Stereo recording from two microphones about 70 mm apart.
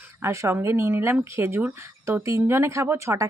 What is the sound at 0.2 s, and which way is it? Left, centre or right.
Speech, right.